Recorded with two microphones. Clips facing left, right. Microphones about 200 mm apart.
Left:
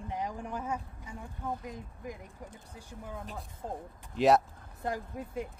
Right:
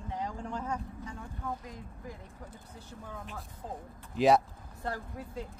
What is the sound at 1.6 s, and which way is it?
Speech, 20° left (ahead or behind).